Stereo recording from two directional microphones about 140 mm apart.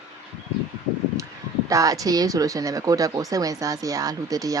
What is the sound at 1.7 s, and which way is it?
Speech, 25° right (ahead or behind).